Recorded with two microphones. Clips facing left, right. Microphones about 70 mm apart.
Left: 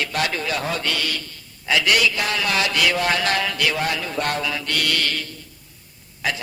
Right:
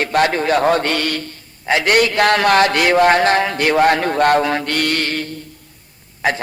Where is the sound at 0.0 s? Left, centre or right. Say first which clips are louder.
Right 8 dB; right.